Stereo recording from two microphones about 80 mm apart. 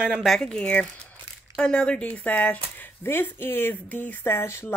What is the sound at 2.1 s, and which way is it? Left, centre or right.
Speech, left.